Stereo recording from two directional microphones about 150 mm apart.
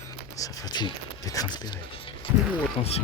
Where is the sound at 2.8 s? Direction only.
40° left (ahead or behind).